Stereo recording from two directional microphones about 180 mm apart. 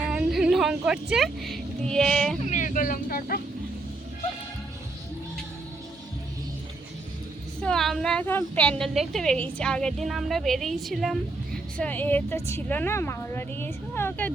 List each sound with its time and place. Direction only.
0.1 s a sound: 5° right (ahead or behind)
2.4 s speech: 40° left (ahead or behind)
7.6 s a woman's voice: 5° left (ahead or behind)